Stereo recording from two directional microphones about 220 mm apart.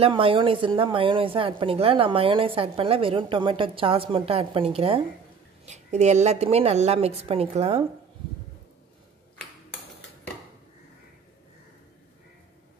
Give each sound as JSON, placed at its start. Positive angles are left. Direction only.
{"t": 0.0, "sound": "speech", "side_deg": -25}